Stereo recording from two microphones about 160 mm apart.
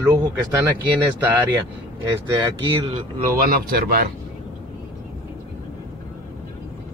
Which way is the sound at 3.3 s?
70° right (ahead or behind).